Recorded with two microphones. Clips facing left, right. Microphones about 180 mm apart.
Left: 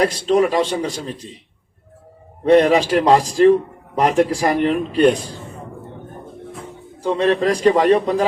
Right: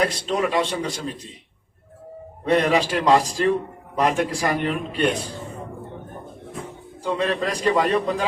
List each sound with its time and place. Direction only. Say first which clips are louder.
0.0 s a man's voice: left 6 dB; 40° left (ahead or behind)
2.4 s a man's voice: left 6 dB; 35° left (ahead or behind)
7.0 s a man's voice: left 6 dB; 35° left (ahead or behind)